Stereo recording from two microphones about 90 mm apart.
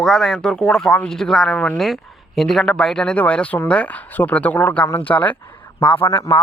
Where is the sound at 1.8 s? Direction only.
Centre (ahead or behind).